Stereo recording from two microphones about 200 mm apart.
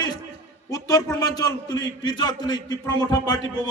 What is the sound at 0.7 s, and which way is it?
A man's voice, 15° left (ahead or behind).